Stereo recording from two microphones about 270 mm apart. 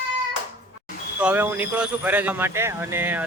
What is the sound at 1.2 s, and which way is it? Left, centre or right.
Speech, centre.